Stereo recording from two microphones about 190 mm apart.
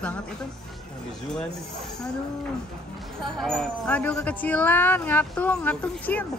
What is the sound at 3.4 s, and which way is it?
Speech, centre (ahead or behind).